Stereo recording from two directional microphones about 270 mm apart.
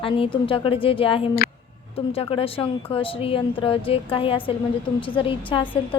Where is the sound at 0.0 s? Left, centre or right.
Centre.